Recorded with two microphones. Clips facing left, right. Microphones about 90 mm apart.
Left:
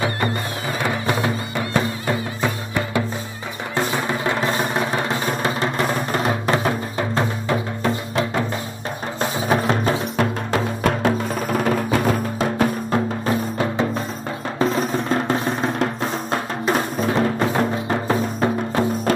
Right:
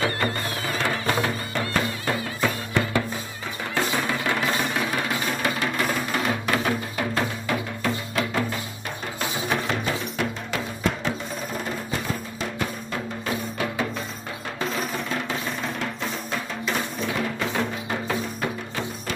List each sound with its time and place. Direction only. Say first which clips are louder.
0.8 s music: left 3 dB; 15° left (ahead or behind)
9.2 s music: left 7 dB; 40° left (ahead or behind)